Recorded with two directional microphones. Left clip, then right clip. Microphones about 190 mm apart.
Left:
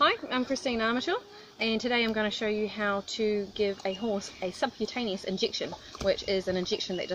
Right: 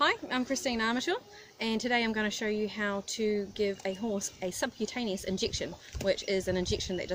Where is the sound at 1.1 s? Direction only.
60° right (ahead or behind).